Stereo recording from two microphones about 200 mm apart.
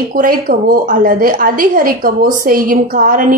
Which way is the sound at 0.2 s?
45° right (ahead or behind).